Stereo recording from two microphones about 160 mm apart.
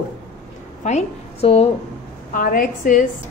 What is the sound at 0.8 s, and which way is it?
Speech, 40° left (ahead or behind).